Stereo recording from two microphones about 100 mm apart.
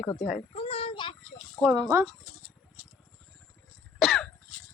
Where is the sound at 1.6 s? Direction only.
35° right (ahead or behind).